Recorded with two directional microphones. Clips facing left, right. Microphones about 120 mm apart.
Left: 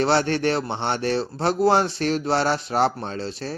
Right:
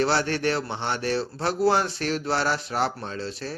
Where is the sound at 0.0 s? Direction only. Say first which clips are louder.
Left 3 dB; 25° left (ahead or behind).